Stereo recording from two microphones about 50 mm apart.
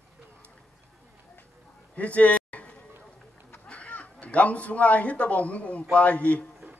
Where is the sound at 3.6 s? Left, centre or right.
Left.